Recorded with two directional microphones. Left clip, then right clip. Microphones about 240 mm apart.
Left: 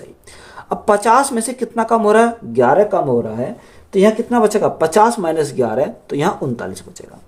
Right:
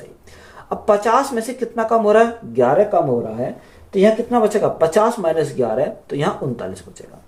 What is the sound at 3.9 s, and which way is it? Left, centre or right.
Speech, left.